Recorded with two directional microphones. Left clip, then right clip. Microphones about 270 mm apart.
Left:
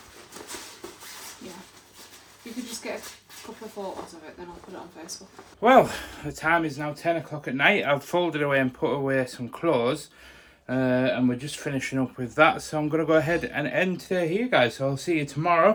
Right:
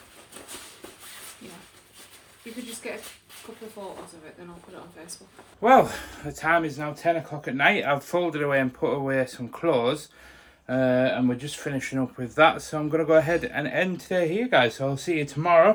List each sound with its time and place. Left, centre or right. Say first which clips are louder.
5.6 s speech: even; centre